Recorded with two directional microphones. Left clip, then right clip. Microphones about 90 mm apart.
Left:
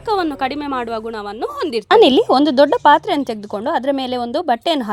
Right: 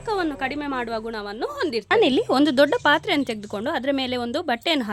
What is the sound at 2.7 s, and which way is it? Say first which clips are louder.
A woman's voice: left 7 dB; 20° left (ahead or behind).